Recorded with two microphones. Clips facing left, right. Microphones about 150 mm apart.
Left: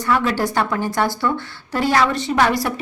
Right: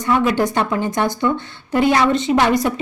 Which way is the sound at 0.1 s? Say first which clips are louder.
Right 3 dB; 20° right (ahead or behind).